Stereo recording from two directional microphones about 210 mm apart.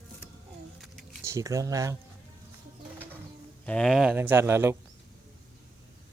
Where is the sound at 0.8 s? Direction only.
Centre (ahead or behind).